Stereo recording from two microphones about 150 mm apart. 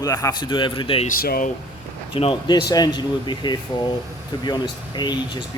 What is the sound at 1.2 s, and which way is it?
Speech, 90° left.